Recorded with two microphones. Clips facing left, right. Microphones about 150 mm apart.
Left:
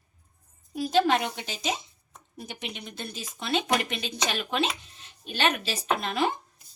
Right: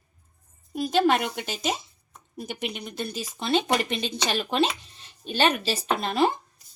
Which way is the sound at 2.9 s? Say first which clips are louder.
Right 6 dB; 35° right (ahead or behind).